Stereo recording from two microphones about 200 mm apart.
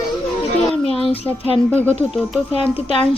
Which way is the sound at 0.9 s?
30° left (ahead or behind).